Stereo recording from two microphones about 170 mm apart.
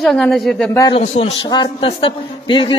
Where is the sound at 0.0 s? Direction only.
5° left (ahead or behind).